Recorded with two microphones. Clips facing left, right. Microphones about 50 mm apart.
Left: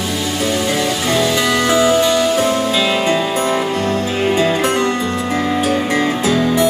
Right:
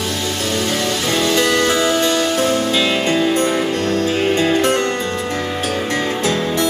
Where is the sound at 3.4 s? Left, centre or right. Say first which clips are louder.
Left 1 dB; centre.